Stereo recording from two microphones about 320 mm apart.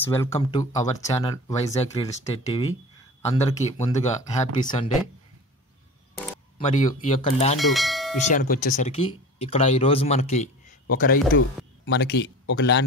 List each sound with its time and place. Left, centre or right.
0.0 s speech: centre
6.6 s speech: left
7.5 s speech: centre
8.3 s speech: left